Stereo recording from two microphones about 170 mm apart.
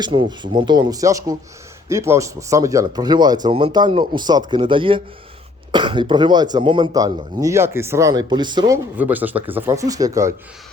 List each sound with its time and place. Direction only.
0.0 s speech: 25° right (ahead or behind)
9.0 s speech: 10° right (ahead or behind)